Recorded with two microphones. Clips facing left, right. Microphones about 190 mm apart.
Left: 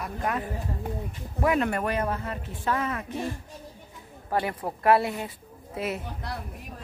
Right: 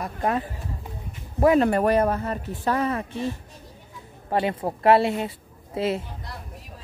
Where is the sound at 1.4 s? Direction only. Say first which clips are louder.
Right 7 dB; 30° right (ahead or behind).